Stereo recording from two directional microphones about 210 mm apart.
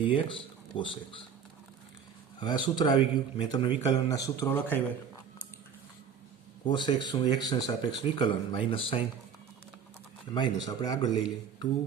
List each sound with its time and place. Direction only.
0.0 s speech: 25° left (ahead or behind)
2.4 s speech: 20° left (ahead or behind)
4.4 s speech: 10° left (ahead or behind)
6.7 s speech: 20° left (ahead or behind)
10.3 s speech: 20° left (ahead or behind)